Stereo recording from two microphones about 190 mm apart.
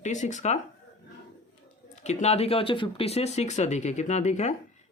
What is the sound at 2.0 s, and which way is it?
Speech, 35° left (ahead or behind).